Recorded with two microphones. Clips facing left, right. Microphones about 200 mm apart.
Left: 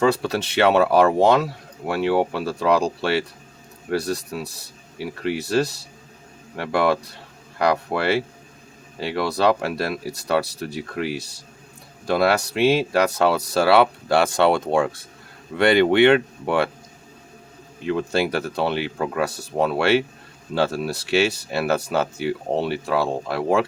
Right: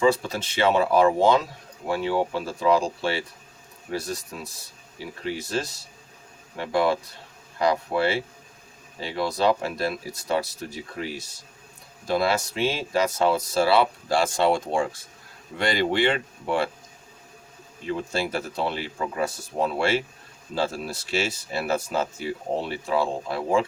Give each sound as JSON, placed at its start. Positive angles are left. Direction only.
{"t": 0.0, "sound": "speech", "side_deg": 70}
{"t": 17.8, "sound": "speech", "side_deg": 70}